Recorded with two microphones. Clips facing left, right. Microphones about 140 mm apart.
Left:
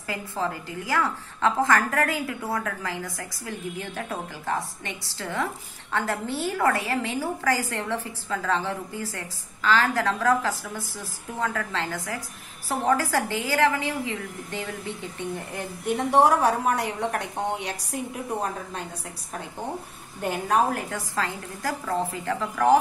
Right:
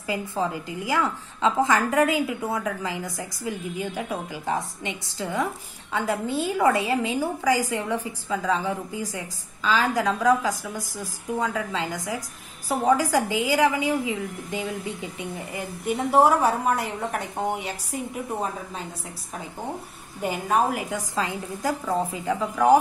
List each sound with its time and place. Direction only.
0.0 s a woman's voice: 15° right (ahead or behind)
20.2 s a woman's voice: 5° right (ahead or behind)